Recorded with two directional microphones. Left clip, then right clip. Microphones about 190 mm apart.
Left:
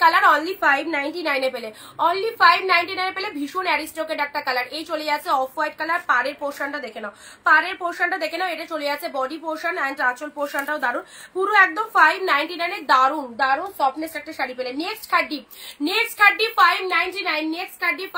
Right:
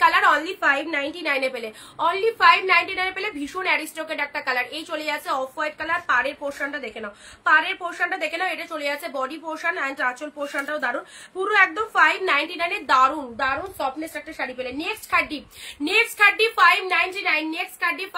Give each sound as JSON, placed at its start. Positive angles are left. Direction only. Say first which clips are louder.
{"t": 0.0, "sound": "a woman's voice", "louder": "left 2 dB", "side_deg": -20}